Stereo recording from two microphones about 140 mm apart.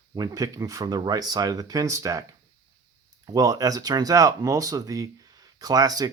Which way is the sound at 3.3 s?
25° right (ahead or behind).